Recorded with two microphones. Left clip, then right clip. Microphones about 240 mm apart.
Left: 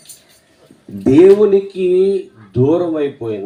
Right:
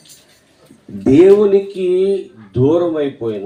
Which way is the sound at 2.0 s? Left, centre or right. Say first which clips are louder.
Left 2 dB; left.